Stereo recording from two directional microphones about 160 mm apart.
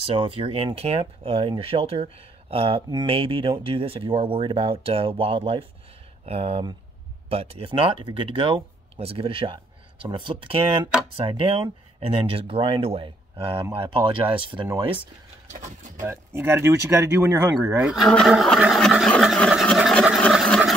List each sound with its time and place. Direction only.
0.0 s speech: 35° right (ahead or behind)
16.0 s speech: 15° right (ahead or behind)
17.9 s speech: centre (ahead or behind)